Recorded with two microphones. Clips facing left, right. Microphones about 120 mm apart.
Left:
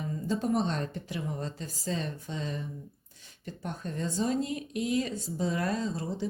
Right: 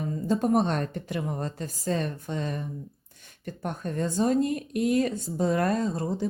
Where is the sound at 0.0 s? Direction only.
50° right (ahead or behind).